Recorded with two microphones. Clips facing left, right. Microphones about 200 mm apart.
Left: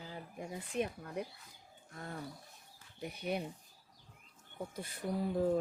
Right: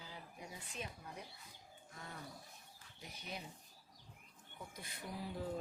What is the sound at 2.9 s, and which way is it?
Speech, 60° left (ahead or behind).